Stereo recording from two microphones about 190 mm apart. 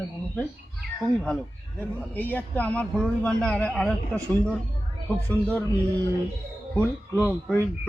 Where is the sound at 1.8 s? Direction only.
10° left (ahead or behind).